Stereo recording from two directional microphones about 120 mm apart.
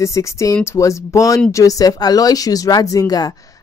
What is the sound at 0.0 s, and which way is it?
A woman's voice, 25° left (ahead or behind).